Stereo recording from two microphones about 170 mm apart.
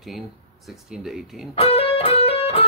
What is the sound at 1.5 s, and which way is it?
Music, 35° left (ahead or behind).